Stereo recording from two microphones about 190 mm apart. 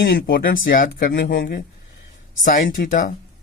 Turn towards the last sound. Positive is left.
turn(degrees=45)  # may be behind; listen again after turning